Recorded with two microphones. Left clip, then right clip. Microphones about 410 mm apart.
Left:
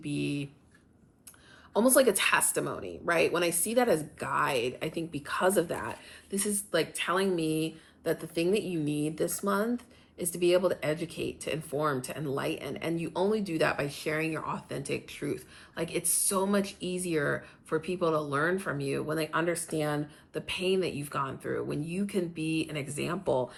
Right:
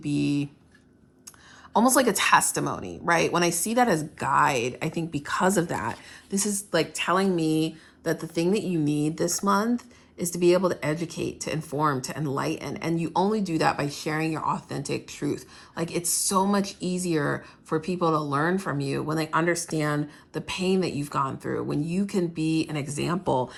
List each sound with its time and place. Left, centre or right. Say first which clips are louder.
0.0 s a woman's voice: right 7 dB; centre
1.7 s a woman's voice: right 3 dB; centre